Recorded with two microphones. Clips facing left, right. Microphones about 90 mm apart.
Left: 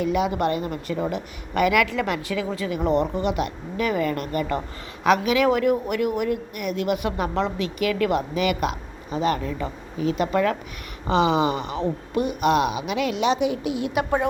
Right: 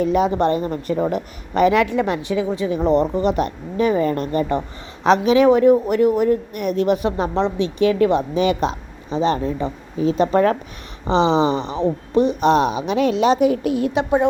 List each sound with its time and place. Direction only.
0.0 s a woman's voice: 35° right (ahead or behind)
11.0 s a woman's voice: 25° right (ahead or behind); by 13.9 s 45° right (ahead or behind)
13.9 s speech: 25° right (ahead or behind)